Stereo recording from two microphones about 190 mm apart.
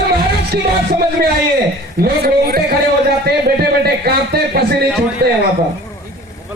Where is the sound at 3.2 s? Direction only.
55° right (ahead or behind).